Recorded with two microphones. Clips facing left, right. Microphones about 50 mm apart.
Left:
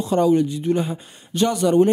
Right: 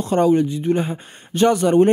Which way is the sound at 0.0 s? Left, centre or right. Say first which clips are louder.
Right 1 dB; right.